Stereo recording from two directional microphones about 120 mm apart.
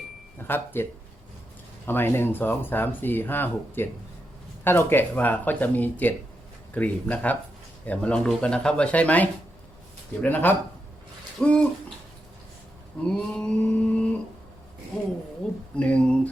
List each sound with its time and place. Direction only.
0.3 s speech: 15° left (ahead or behind)
1.9 s speech: 20° left (ahead or behind)
13.1 s mantra: 5° left (ahead or behind)
15.7 s speech: 10° left (ahead or behind)